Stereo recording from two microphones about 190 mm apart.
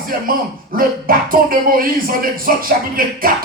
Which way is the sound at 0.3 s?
50° right (ahead or behind).